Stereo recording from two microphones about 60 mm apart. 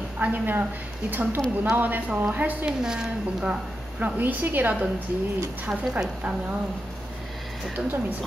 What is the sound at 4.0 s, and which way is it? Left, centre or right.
Speech, right.